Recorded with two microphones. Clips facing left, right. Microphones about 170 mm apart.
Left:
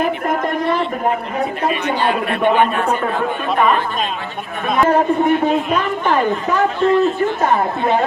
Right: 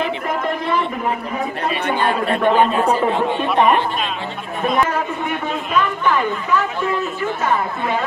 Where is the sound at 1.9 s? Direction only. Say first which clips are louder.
Even; 50° right (ahead or behind).